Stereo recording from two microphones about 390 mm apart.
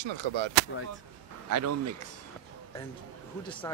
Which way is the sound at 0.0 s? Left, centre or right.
Right.